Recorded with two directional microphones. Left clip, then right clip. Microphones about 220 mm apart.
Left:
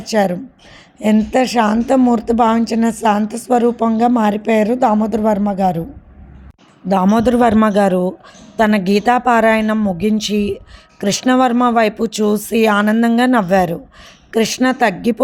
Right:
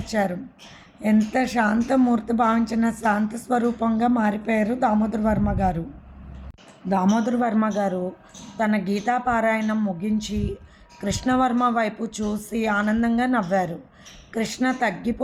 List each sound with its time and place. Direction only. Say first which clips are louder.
0.0 s speech: left 9 dB; 40° left (ahead or behind)
6.8 s a man's voice: left 9 dB; 40° left (ahead or behind)